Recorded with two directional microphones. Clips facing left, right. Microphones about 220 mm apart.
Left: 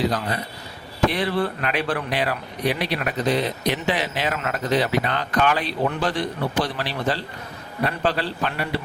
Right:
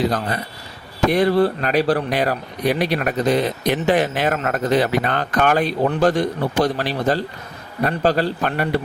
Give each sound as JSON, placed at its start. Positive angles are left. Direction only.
{"t": 1.1, "sound": "speech", "side_deg": -40}